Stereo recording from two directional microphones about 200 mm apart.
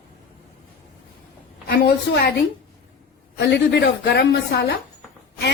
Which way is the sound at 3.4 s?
55° left (ahead or behind).